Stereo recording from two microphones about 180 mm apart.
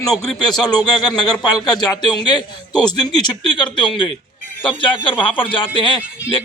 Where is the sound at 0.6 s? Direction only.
20° left (ahead or behind).